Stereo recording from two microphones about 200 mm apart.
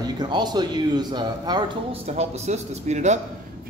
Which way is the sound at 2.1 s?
35° right (ahead or behind).